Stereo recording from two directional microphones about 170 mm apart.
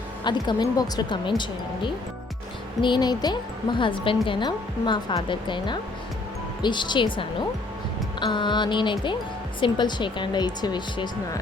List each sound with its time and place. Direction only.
0.3 s speech: 25° left (ahead or behind)
2.8 s speech: 25° left (ahead or behind)